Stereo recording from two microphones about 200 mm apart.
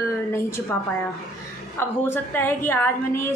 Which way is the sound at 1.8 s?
10° left (ahead or behind).